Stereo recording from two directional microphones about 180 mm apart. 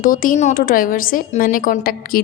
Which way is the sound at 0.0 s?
50° left (ahead or behind).